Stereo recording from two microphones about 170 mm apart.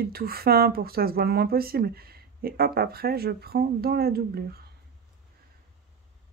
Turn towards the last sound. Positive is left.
turn(degrees=-65)  # may be behind; listen again after turning